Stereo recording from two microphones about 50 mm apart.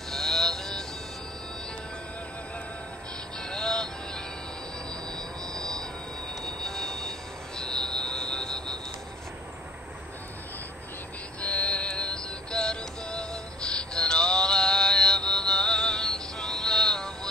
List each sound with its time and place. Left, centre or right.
0.1 s vehicle: centre
3.3 s music: centre
5.0 s train: centre
11.4 s synthetic singing: left